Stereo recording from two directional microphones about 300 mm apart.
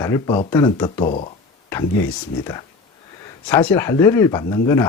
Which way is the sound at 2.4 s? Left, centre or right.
Centre.